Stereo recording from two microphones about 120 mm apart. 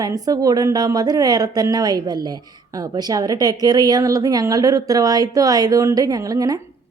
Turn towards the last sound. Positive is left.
turn(degrees=-30)  # may be behind; listen again after turning